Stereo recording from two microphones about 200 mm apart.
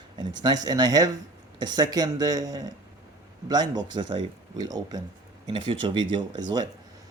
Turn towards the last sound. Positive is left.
turn(degrees=-20)  # may be behind; listen again after turning